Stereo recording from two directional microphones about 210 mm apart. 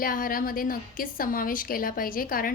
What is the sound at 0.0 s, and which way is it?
A woman's voice, 40° left (ahead or behind).